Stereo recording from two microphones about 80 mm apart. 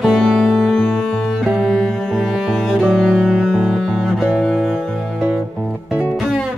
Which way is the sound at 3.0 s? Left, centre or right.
Centre.